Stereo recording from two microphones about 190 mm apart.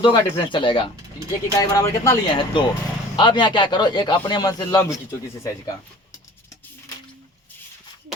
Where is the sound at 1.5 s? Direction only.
15° left (ahead or behind).